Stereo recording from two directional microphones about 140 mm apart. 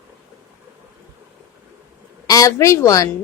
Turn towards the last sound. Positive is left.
turn(degrees=25)  # may be behind; listen again after turning